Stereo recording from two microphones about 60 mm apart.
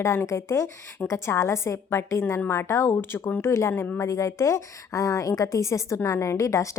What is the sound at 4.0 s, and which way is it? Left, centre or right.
Speech, left.